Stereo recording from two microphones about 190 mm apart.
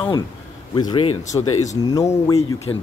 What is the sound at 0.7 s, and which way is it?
Speech, 20° left (ahead or behind).